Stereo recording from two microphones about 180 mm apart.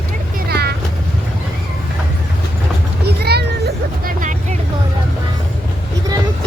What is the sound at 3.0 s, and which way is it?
Vehicle, 65° right (ahead or behind).